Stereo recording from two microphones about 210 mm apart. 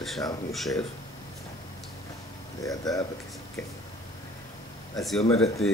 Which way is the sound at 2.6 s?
15° left (ahead or behind).